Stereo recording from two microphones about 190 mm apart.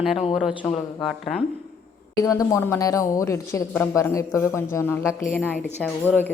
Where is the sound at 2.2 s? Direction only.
15° left (ahead or behind).